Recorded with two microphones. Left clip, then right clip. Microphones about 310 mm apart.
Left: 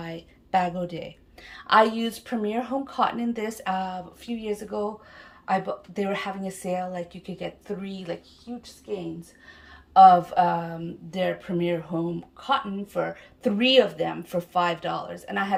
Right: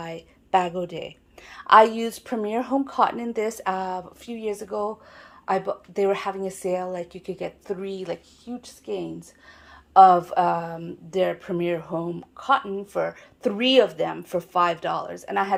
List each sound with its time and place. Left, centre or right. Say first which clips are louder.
0.0 s a woman's voice: right 2 dB; centre
9.9 s speech: even; centre